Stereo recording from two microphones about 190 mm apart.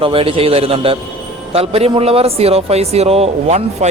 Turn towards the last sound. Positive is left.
turn(degrees=-35)  # may be behind; listen again after turning